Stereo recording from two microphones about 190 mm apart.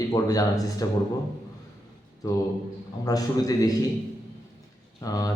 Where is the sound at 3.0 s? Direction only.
20° left (ahead or behind).